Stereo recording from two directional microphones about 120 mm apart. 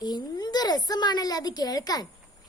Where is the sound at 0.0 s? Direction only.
35° left (ahead or behind).